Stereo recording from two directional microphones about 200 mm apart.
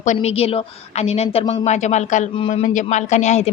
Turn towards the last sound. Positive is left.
turn(degrees=35)  # may be behind; listen again after turning